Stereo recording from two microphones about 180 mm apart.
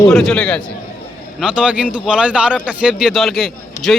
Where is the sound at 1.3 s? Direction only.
5° right (ahead or behind).